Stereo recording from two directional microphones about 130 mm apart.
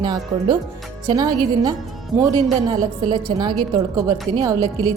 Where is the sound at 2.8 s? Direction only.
30° right (ahead or behind).